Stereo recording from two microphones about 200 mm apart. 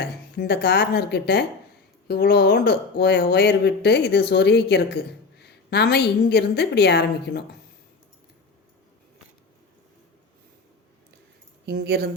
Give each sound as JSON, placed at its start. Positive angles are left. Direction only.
{"t": 0.0, "sound": "a woman's voice", "side_deg": 55}
{"t": 11.6, "sound": "speech", "side_deg": -55}